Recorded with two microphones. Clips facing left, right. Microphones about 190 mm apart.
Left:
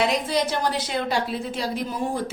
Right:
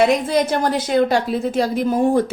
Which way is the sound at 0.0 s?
50° right (ahead or behind).